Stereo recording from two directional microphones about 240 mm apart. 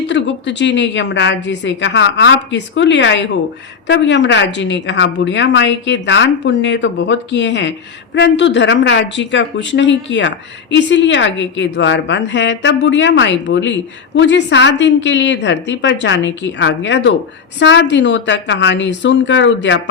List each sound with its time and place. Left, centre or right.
0.1 s speech: left